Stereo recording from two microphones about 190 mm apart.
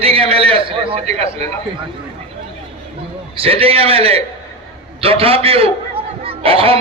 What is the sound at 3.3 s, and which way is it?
Speech, 30° right (ahead or behind).